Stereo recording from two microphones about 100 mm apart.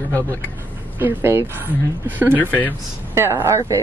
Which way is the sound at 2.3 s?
15° left (ahead or behind).